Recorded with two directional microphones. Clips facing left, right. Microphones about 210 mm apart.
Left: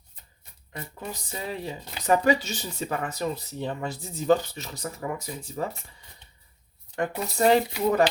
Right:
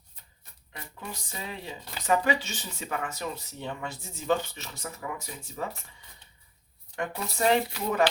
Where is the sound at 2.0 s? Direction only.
40° left (ahead or behind).